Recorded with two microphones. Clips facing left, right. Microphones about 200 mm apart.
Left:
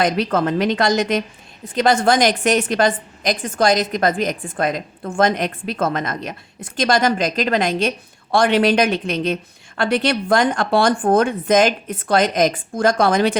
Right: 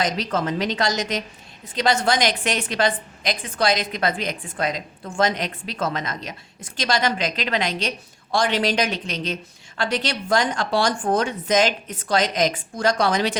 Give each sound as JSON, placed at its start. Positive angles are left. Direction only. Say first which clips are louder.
{"t": 0.0, "sound": "a woman's voice", "louder": "left 6 dB", "side_deg": 60}